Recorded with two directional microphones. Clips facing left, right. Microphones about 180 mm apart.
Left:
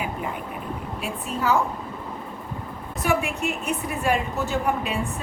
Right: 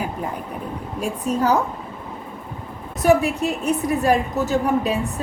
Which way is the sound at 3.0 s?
40° right (ahead or behind).